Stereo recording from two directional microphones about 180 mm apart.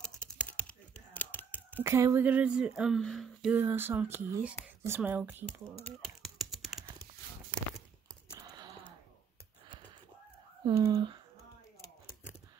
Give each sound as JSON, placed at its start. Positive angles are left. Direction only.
{"t": 0.0, "sound": "typing", "side_deg": 5}
{"t": 1.8, "sound": "speech", "side_deg": -15}
{"t": 3.5, "sound": "speech", "side_deg": -10}
{"t": 6.0, "sound": "typing", "side_deg": 0}
{"t": 8.4, "sound": "gasp", "side_deg": -20}
{"t": 10.6, "sound": "speech", "side_deg": -20}